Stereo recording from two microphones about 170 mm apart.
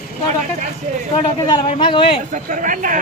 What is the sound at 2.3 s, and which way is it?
Speech, 50° right (ahead or behind).